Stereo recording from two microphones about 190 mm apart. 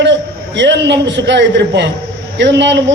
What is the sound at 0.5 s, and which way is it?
A man's voice, 65° right (ahead or behind).